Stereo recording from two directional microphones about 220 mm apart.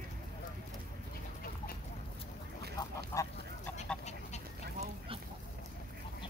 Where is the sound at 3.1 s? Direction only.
15° left (ahead or behind).